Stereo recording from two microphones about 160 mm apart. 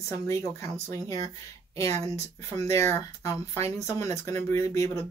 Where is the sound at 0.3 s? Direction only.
20° left (ahead or behind).